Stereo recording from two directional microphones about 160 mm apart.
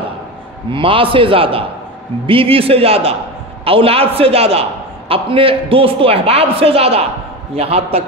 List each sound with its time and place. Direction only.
0.7 s a man's voice: 35° right (ahead or behind)